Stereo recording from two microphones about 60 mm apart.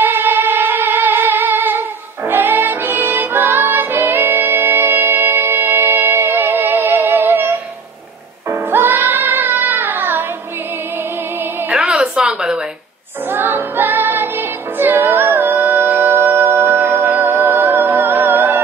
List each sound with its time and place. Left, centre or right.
0.0 s music: right
11.7 s a sound: centre
13.3 s music: right
16.8 s music: right